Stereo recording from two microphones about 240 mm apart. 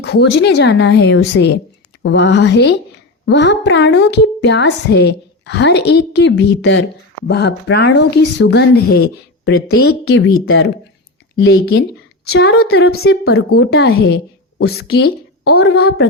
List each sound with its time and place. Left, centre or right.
0.0 s a woman's voice: left
12.8 s a woman's voice: left
13.6 s a woman's voice: left
15.8 s a woman's voice: left